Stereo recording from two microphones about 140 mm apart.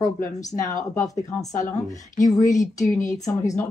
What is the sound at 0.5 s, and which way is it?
Speech, 25° left (ahead or behind).